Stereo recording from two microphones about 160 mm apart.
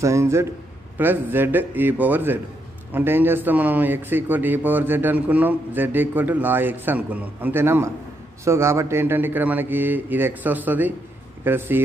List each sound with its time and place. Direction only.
0.0 s a man's voice: 15° right (ahead or behind)